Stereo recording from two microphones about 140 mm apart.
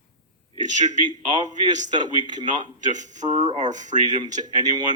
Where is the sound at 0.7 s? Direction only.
60° right (ahead or behind).